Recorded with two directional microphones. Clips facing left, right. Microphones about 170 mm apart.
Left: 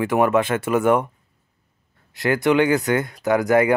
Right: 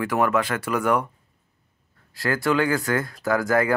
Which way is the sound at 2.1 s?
20° left (ahead or behind).